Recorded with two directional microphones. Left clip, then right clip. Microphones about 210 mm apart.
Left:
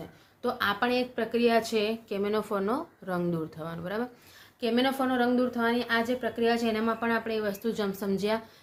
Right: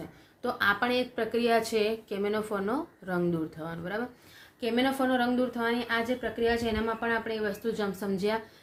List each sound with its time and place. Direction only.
0.4 s a woman's voice: 15° left (ahead or behind)